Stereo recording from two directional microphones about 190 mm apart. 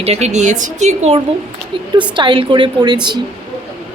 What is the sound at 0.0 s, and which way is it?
A woman's voice, 35° right (ahead or behind).